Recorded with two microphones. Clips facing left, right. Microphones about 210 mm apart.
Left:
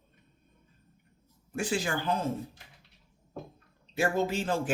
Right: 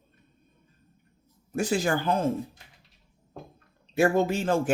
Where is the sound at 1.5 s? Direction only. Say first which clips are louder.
Right 5 dB; 40° right (ahead or behind).